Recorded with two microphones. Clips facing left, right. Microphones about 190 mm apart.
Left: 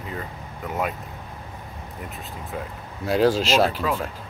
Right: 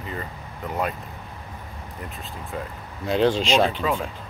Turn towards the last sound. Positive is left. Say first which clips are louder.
# even
turn(degrees=5)  # may be behind; listen again after turning